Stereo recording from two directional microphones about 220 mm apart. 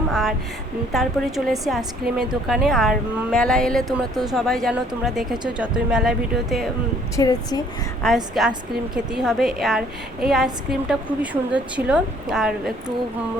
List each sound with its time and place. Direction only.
0.1 s a sound: centre (ahead or behind)
0.9 s a woman's voice: centre (ahead or behind)
7.2 s speech: 15° left (ahead or behind)
8.0 s a woman's voice: centre (ahead or behind)